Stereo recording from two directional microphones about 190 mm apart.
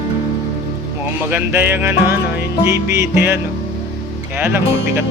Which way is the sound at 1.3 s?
10° right (ahead or behind).